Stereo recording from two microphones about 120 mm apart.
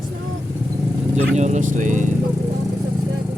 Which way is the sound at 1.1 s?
75° right (ahead or behind).